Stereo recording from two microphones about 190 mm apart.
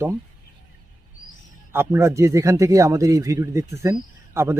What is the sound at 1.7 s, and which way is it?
Speech, 15° right (ahead or behind).